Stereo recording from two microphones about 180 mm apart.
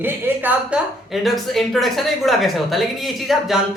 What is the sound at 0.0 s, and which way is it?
A woman's voice, 10° right (ahead or behind).